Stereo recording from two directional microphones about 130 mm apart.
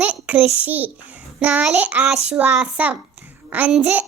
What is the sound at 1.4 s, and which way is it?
Child singing, 10° right (ahead or behind).